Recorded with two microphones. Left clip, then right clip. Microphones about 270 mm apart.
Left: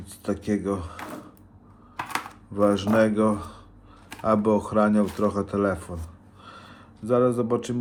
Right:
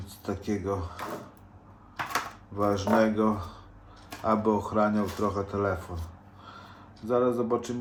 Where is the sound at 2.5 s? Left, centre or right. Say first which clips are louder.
Left 6 dB; left.